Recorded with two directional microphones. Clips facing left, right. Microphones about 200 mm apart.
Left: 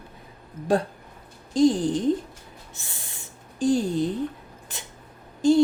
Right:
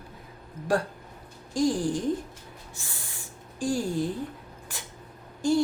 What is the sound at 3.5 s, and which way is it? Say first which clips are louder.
Speech: left 5 dB; 20° left (ahead or behind).